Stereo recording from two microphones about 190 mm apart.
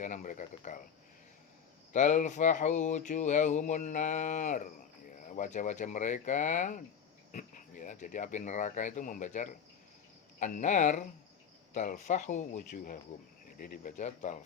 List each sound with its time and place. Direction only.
0.0 s speech: 40° left (ahead or behind)
1.9 s speech: 40° left (ahead or behind)